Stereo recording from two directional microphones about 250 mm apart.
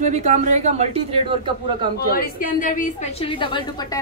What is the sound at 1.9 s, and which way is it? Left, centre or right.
A woman's voice, left.